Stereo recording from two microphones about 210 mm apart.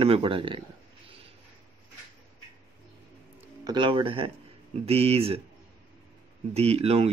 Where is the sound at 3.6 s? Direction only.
20° right (ahead or behind).